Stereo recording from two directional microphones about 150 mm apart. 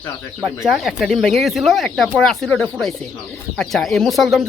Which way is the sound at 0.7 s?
Centre (ahead or behind).